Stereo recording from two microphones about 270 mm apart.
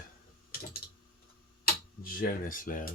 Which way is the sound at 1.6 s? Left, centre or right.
Left.